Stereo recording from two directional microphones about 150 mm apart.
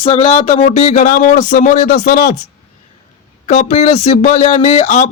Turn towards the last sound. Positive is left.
turn(degrees=50)  # may be behind; listen again after turning